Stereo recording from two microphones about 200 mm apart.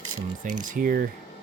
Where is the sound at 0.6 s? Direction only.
40° right (ahead or behind).